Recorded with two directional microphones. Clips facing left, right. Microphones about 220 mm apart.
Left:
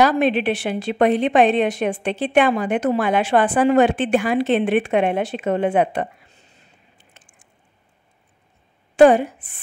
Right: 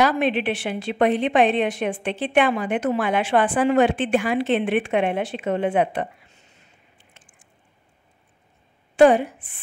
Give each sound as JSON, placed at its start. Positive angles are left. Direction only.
{"t": 0.0, "sound": "a woman's voice", "side_deg": 40}
{"t": 8.9, "sound": "a woman's voice", "side_deg": 45}